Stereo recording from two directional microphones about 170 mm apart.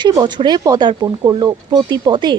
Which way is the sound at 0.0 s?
25° right (ahead or behind).